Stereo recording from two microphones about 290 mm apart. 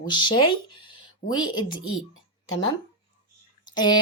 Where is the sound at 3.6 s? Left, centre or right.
Centre.